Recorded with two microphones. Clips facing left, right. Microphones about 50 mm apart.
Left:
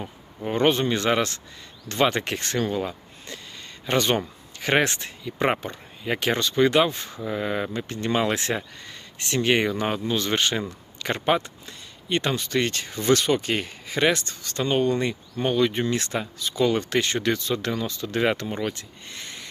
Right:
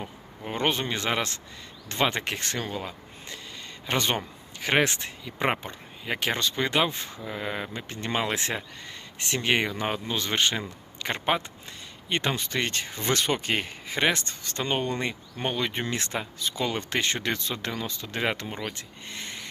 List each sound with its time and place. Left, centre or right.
0.0 s speech: centre
18.0 s speech: centre
19.0 s a sound: centre